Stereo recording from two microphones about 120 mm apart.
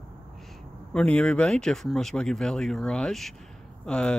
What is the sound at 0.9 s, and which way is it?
Speech, 10° left (ahead or behind).